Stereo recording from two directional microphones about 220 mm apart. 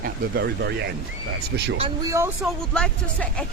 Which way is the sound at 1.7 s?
25° right (ahead or behind).